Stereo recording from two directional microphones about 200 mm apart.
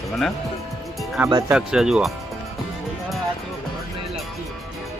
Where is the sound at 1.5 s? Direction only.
5° right (ahead or behind).